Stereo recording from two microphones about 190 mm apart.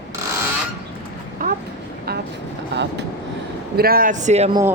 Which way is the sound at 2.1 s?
55° right (ahead or behind).